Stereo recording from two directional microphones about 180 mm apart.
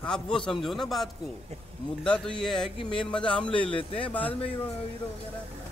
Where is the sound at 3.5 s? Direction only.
30° left (ahead or behind).